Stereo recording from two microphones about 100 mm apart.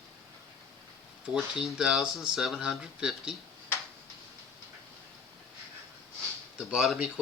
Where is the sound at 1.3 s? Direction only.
5° right (ahead or behind).